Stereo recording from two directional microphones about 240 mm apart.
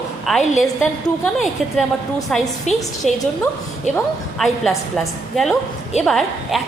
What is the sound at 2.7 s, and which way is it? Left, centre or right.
Speech, left.